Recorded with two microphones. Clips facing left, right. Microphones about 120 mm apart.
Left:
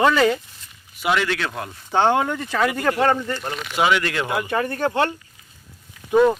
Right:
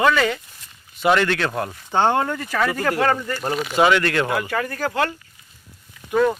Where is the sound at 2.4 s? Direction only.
15° left (ahead or behind).